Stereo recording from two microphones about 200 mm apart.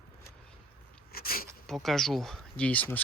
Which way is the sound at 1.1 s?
50° left (ahead or behind).